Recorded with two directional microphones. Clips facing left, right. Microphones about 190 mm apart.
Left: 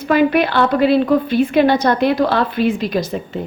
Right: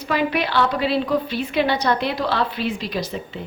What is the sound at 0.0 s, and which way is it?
A woman's voice, 50° left (ahead or behind).